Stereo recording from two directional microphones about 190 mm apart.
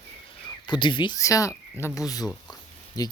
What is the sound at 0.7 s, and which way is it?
Speech, 25° left (ahead or behind).